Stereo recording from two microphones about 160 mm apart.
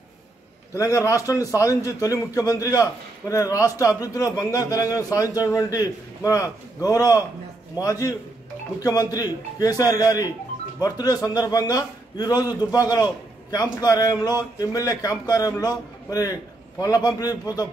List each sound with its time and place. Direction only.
0.7 s a man's voice: 20° left (ahead or behind)